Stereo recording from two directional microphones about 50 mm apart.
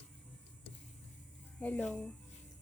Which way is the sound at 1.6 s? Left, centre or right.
Left.